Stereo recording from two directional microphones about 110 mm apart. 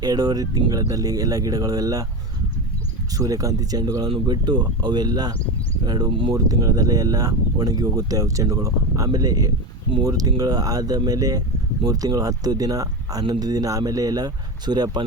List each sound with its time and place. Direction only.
0.0 s speech: 35° right (ahead or behind)
3.2 s speech: 35° right (ahead or behind)
6.3 s speech: 35° right (ahead or behind)